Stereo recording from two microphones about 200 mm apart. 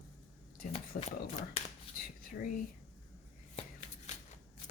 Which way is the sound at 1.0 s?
30° left (ahead or behind).